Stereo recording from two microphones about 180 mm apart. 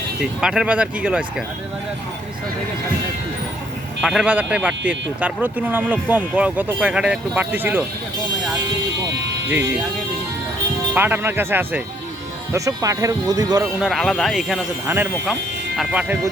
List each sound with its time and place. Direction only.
0.2 s speech: 5° right (ahead or behind)
4.0 s speech: 5° right (ahead or behind)
9.0 s music: 70° right (ahead or behind)
9.5 s speech: 10° right (ahead or behind)
10.9 s speech: 10° right (ahead or behind)
13.7 s speech: centre (ahead or behind)